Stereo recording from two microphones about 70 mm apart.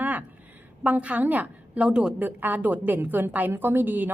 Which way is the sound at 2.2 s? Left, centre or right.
Right.